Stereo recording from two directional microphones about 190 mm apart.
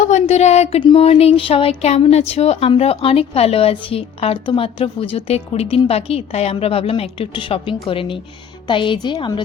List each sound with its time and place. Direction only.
0.0 s a woman's voice: 40° left (ahead or behind)